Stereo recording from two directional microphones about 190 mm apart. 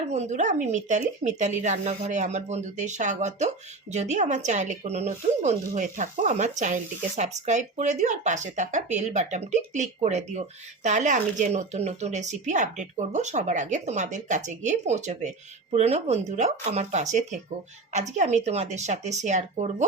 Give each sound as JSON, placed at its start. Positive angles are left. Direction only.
{"t": 0.1, "sound": "speech", "side_deg": -40}